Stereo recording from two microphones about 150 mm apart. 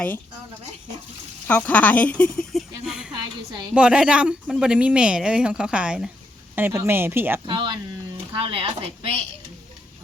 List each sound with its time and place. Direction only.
1.5 s a sound: 10° left (ahead or behind)
3.8 s speech: 5° right (ahead or behind)
7.4 s speech: 30° right (ahead or behind)